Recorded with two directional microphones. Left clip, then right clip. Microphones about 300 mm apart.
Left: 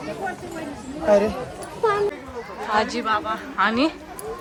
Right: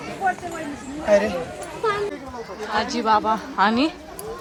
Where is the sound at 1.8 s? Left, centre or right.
Left.